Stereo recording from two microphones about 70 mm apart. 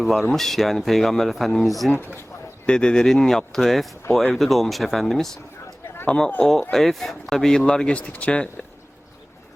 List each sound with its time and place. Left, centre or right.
0.0 s speech: centre
1.9 s speech: left
2.6 s speech: centre